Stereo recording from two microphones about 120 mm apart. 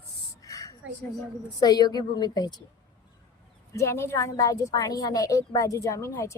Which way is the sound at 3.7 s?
20° left (ahead or behind).